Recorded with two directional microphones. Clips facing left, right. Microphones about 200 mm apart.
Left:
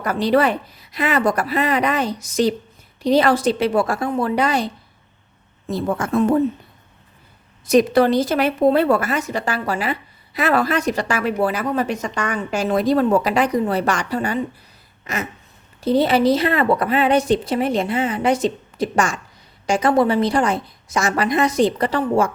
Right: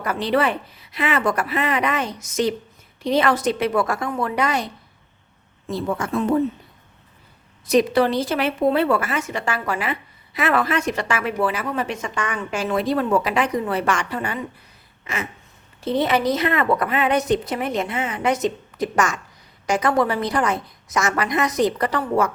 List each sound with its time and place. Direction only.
0.0 s a woman's voice: 40° left (ahead or behind)
5.6 s a woman's voice: 45° left (ahead or behind)
7.7 s a woman's voice: 45° left (ahead or behind)
15.0 s a sound: 40° left (ahead or behind)
15.8 s a woman's voice: 35° left (ahead or behind)